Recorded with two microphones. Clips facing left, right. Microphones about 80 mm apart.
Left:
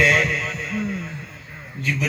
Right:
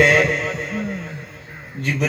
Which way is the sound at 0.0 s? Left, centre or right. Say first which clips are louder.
Right 4 dB; right.